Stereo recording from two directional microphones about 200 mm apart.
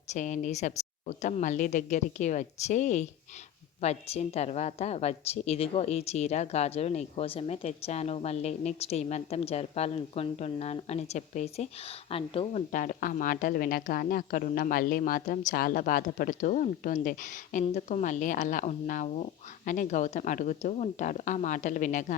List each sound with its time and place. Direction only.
0.1 s speech: 35° left (ahead or behind)
12.7 s speech: 40° left (ahead or behind)